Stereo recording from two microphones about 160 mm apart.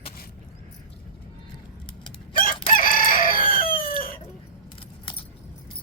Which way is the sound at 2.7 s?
60° left (ahead or behind).